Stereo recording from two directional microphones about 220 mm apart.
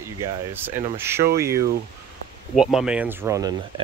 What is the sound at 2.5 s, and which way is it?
Speech, centre (ahead or behind).